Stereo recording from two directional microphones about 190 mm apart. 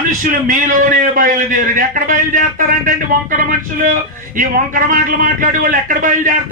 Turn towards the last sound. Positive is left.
turn(degrees=-45)  # may be behind; listen again after turning